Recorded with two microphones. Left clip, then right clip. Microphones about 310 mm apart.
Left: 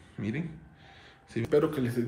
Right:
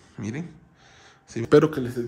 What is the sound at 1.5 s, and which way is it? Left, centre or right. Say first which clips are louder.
Speech: right 8 dB; right.